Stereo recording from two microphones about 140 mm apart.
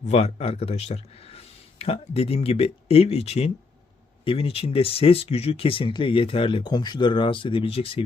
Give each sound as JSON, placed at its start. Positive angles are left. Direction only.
{"t": 0.0, "sound": "speech", "side_deg": 50}